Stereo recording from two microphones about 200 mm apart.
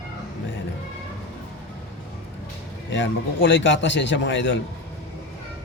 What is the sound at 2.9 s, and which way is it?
A man's voice, 65° left (ahead or behind).